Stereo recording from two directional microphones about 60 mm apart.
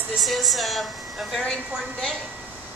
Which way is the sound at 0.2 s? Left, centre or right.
Centre.